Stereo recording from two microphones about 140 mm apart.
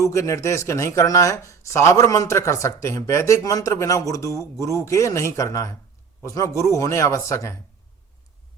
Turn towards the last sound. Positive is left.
turn(degrees=20)  # may be behind; listen again after turning